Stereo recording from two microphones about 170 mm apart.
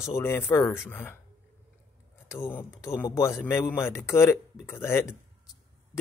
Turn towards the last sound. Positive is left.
turn(degrees=15)  # may be behind; listen again after turning